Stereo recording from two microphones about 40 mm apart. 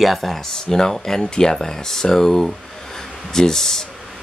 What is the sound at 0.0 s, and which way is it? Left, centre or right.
Speech, centre.